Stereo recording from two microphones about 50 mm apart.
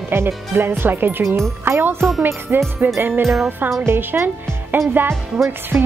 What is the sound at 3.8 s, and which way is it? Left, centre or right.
Speech, right.